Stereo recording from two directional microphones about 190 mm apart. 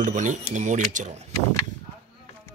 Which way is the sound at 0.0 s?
40° right (ahead or behind).